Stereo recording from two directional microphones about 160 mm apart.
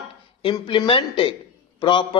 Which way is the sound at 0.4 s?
35° left (ahead or behind).